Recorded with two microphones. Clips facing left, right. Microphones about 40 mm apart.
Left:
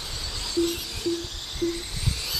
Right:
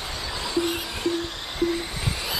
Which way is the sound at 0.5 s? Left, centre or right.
Right.